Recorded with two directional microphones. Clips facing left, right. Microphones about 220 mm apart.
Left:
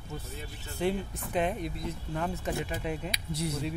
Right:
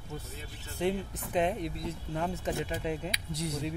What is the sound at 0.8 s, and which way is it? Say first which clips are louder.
Speech: left 1 dB; 20° right (ahead or behind).